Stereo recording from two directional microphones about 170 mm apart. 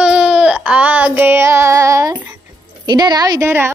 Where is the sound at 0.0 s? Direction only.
5° right (ahead or behind).